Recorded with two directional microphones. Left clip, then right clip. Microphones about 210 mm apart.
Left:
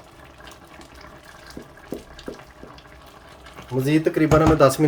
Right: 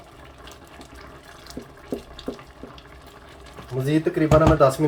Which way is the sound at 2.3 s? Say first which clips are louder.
Right 2 dB; 5° left (ahead or behind).